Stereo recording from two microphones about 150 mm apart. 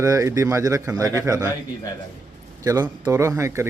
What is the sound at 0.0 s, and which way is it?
Speech, 20° right (ahead or behind).